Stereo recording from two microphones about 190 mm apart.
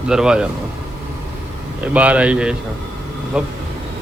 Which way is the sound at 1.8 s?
5° right (ahead or behind).